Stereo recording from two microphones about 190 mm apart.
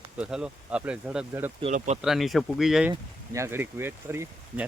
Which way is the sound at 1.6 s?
40° right (ahead or behind).